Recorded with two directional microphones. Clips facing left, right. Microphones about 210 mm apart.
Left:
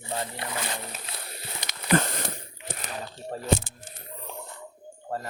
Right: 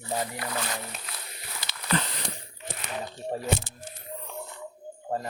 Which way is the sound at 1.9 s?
50° left (ahead or behind).